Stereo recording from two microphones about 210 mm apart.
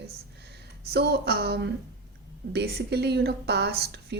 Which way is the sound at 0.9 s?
50° right (ahead or behind).